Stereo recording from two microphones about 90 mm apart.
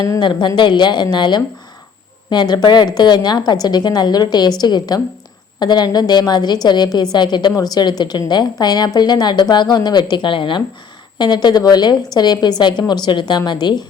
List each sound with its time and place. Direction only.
0.2 s a woman's voice: 55° left (ahead or behind)
11.2 s a woman's voice: 55° left (ahead or behind)